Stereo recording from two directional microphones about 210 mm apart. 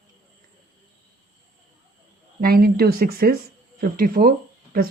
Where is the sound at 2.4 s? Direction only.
45° right (ahead or behind).